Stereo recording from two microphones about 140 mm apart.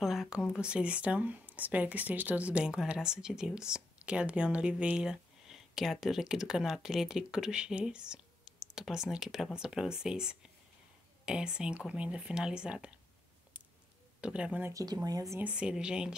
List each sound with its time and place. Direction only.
0.0 s speech: 5° right (ahead or behind)
14.2 s speech: 10° right (ahead or behind)
14.7 s speech: 25° right (ahead or behind)
15.4 s speech: 5° right (ahead or behind)